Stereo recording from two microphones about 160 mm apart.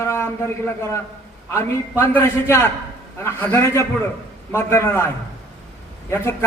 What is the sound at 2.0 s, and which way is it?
A man's voice, 15° left (ahead or behind).